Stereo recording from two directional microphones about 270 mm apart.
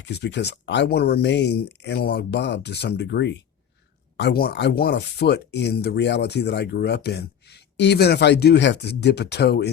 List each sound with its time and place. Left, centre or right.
0.0 s speech: left